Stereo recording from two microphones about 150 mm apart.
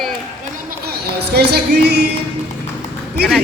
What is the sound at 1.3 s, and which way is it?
Speech, 90° right.